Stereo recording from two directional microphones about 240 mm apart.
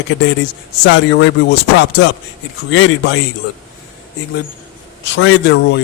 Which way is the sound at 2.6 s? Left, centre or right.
Left.